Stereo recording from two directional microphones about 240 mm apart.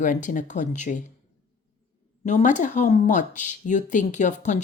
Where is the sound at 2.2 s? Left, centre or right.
Left.